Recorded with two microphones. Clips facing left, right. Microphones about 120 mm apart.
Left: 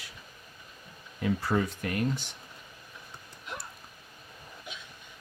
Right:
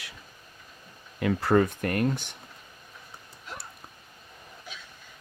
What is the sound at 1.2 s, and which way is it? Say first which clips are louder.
Speech: right 6 dB; 65° right (ahead or behind).